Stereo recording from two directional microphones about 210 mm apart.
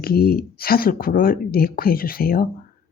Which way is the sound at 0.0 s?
45° left (ahead or behind).